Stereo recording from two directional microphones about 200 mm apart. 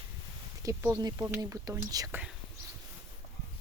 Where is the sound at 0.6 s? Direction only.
15° right (ahead or behind).